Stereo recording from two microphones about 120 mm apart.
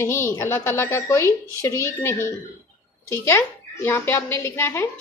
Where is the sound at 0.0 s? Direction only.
20° left (ahead or behind).